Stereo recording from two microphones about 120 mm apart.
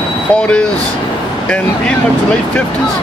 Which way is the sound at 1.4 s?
10° left (ahead or behind).